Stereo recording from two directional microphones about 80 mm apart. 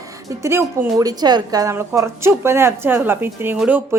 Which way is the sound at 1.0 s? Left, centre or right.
Right.